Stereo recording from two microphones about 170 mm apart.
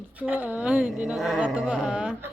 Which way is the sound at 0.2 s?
10° right (ahead or behind).